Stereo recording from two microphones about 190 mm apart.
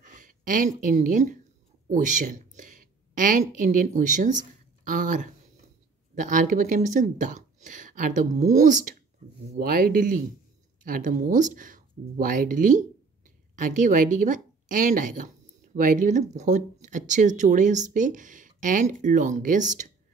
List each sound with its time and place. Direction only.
0.0 s a woman's voice: 45° right (ahead or behind)